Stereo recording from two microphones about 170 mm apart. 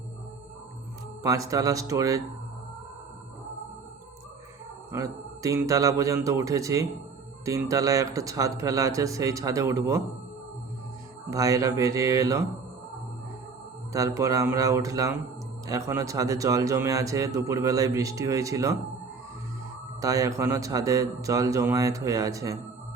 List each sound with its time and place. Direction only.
1.2 s a man's voice: 20° right (ahead or behind)
4.9 s a man's voice: 20° right (ahead or behind)
11.3 s a man's voice: 20° right (ahead or behind)
13.9 s a man's voice: 20° right (ahead or behind)
20.0 s a man's voice: 20° right (ahead or behind)